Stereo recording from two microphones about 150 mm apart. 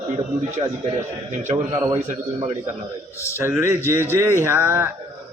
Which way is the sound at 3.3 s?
15° right (ahead or behind).